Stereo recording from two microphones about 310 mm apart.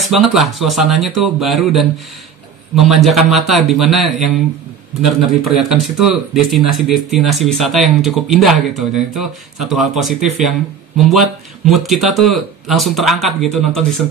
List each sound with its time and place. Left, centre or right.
0.0 s speech: centre